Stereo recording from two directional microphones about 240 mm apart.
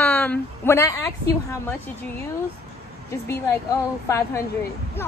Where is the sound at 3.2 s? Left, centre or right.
Centre.